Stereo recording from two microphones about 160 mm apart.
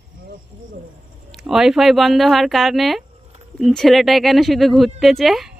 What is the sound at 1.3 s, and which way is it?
Speech, 5° right (ahead or behind).